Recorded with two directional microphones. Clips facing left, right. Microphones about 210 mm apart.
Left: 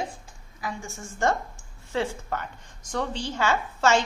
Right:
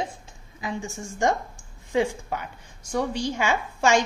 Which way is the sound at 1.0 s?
15° right (ahead or behind).